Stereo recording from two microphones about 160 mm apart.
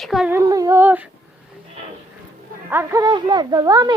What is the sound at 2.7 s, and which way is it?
Speech, 15° right (ahead or behind).